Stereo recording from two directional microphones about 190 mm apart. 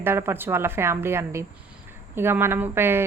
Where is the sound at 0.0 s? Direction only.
10° right (ahead or behind).